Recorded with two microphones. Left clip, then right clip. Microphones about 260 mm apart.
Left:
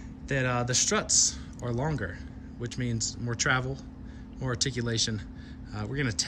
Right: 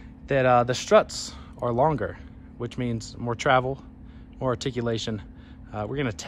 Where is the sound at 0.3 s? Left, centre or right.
Centre.